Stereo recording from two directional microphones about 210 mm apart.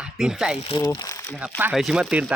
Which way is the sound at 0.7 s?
20° left (ahead or behind).